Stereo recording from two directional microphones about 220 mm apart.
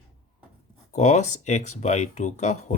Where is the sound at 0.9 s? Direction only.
35° left (ahead or behind).